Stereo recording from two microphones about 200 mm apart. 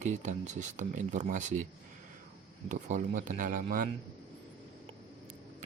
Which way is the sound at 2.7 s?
40° right (ahead or behind).